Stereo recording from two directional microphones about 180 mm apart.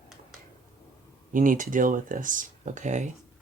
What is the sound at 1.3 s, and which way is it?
Speech, 50° right (ahead or behind).